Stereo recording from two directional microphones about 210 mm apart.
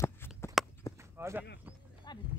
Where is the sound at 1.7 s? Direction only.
10° right (ahead or behind).